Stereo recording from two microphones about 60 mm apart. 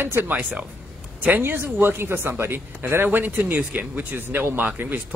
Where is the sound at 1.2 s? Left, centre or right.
Right.